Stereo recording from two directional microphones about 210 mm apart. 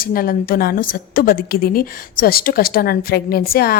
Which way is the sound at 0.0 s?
45° left (ahead or behind).